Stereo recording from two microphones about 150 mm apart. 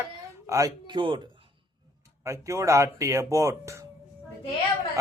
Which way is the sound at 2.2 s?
20° right (ahead or behind).